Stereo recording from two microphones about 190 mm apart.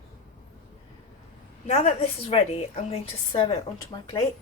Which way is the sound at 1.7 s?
35° left (ahead or behind).